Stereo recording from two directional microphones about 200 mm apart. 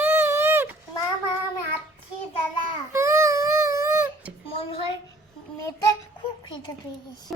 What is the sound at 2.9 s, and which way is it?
Baby cry, 15° right (ahead or behind).